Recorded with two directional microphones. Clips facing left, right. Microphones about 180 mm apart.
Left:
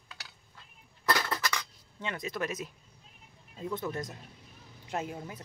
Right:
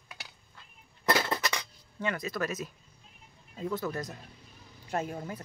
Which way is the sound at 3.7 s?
25° left (ahead or behind).